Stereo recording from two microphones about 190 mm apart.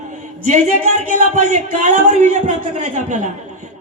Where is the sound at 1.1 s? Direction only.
35° right (ahead or behind).